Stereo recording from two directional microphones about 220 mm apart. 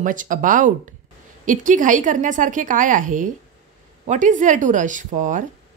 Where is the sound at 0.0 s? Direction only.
35° right (ahead or behind).